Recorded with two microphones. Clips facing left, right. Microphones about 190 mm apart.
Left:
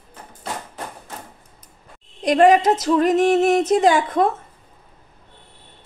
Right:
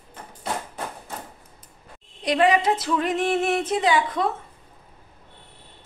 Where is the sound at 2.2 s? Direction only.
45° left (ahead or behind).